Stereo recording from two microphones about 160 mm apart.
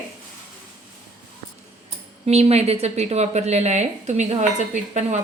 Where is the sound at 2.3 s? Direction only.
40° right (ahead or behind).